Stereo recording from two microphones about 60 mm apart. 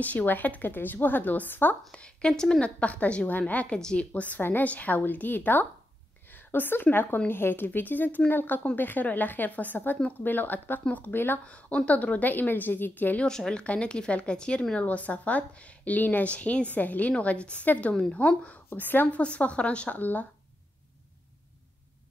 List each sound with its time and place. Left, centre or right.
0.0 s a woman's voice: left
1.9 s speech: centre
2.8 s a woman's voice: left
3.7 s a woman's voice: centre
4.4 s a woman's voice: left
11.4 s a woman's voice: left
13.2 s a woman's voice: centre
18.7 s a woman's voice: left